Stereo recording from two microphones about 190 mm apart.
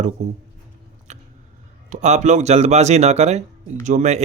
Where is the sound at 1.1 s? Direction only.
40° right (ahead or behind).